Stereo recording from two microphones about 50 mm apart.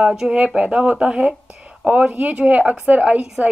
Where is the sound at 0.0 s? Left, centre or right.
Centre.